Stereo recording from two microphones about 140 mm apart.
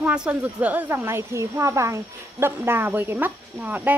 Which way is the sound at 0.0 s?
10° right (ahead or behind).